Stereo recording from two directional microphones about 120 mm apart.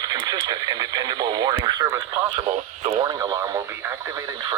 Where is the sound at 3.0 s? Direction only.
30° right (ahead or behind).